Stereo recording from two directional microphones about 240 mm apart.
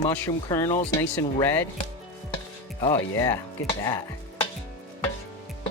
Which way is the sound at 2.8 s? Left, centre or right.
Centre.